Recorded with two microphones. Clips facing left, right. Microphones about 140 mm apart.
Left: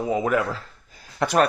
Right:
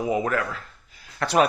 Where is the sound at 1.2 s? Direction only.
20° left (ahead or behind).